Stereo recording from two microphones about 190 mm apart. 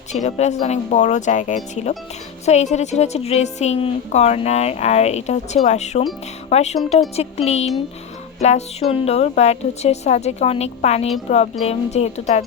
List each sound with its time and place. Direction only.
0.1 s a woman's voice: 35° left (ahead or behind)